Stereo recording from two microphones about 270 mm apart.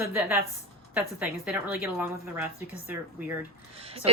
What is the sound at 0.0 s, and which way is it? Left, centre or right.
A woman's voice, centre.